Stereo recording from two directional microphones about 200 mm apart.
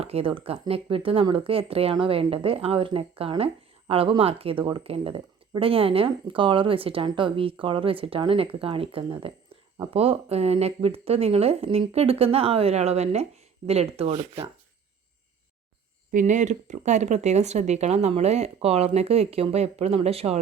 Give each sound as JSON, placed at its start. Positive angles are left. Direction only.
{"t": 0.0, "sound": "speech", "side_deg": -30}
{"t": 16.1, "sound": "speech", "side_deg": -40}